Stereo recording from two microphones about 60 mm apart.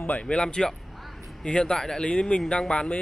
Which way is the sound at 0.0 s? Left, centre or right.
Left.